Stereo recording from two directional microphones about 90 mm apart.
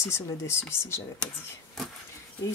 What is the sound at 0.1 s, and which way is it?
Speech, 30° left (ahead or behind).